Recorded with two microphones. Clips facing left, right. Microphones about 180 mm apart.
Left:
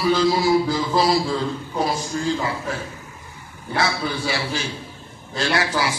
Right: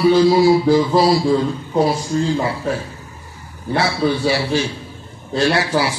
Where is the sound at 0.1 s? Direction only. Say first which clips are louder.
Right 3 dB; 30° right (ahead or behind).